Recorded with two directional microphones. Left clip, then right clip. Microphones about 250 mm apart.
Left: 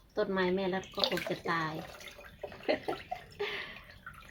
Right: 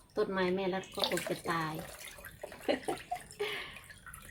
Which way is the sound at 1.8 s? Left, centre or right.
Centre.